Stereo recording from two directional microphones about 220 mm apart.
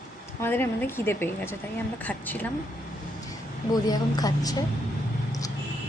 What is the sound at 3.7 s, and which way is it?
Speech, 15° left (ahead or behind).